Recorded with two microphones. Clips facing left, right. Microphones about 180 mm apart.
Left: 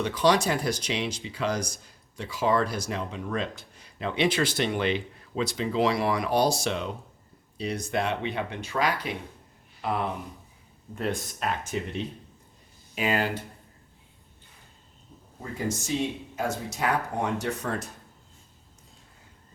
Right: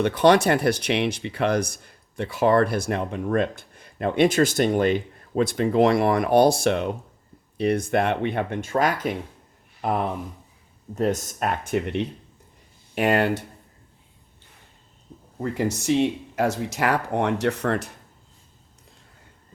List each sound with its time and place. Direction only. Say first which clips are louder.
0.0 s speech: right 6 dB; 60° right (ahead or behind)
10.9 s speech: right 7 dB; 40° right (ahead or behind); by 13.3 s 65° right (ahead or behind)
15.4 s speech: right 6 dB; 70° right (ahead or behind)